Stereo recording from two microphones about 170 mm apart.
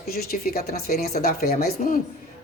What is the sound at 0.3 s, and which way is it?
Speech, 65° left (ahead or behind).